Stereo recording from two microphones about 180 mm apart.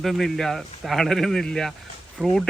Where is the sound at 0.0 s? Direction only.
Centre (ahead or behind).